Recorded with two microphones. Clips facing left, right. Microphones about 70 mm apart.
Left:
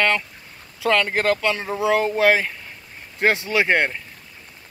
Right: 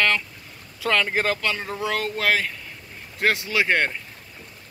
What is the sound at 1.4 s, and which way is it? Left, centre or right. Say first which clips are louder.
Speech: left 4 dB; centre.